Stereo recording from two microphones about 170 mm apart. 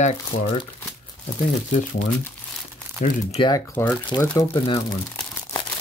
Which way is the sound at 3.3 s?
30° left (ahead or behind).